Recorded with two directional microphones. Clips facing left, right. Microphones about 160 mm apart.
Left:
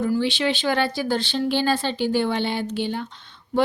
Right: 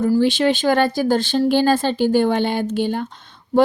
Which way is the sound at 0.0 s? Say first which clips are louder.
Right 6 dB; 45° right (ahead or behind).